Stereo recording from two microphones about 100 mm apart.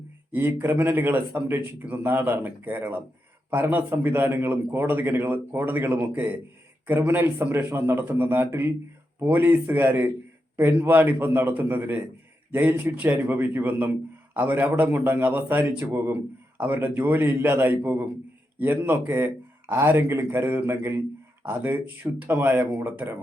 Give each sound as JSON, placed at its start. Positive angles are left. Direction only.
{"t": 0.3, "sound": "a man's voice", "side_deg": -20}